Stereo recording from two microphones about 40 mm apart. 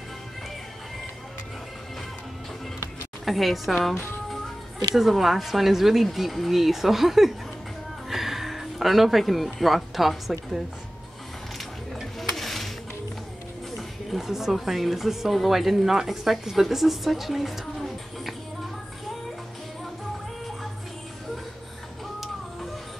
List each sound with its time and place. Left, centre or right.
3.3 s speech: centre
4.9 s speech: centre
12.2 s a sound: centre
13.7 s a woman's voice: centre